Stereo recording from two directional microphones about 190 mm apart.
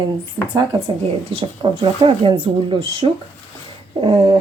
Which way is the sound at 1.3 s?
25° right (ahead or behind).